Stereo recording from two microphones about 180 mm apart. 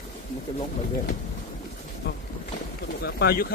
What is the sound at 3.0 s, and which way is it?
Speech, 60° left (ahead or behind).